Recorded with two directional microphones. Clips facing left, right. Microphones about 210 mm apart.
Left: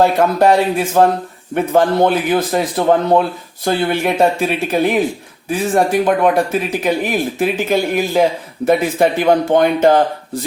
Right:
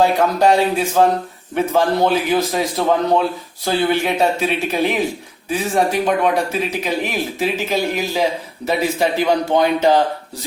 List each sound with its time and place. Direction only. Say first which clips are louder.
0.0 s speech: left 2 dB; 55° left (ahead or behind)